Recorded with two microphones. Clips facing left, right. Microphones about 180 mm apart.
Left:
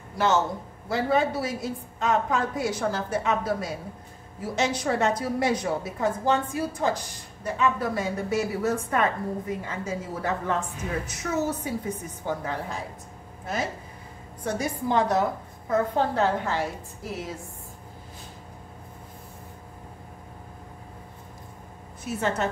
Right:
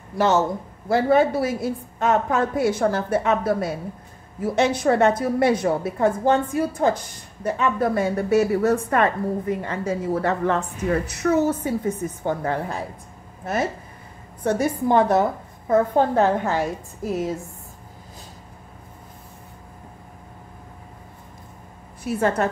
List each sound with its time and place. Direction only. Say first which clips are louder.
0.8 s a woman's voice: right 6 dB; 55° right (ahead or behind)
14.4 s a woman's voice: right 7 dB; 60° right (ahead or behind)
22.0 s a woman's voice: right 5 dB; 55° right (ahead or behind)